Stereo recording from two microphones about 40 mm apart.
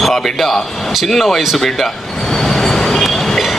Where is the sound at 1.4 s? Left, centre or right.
Centre.